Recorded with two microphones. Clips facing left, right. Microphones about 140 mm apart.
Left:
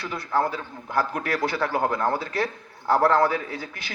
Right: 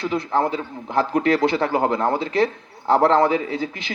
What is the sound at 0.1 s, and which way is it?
A man's voice, 20° right (ahead or behind).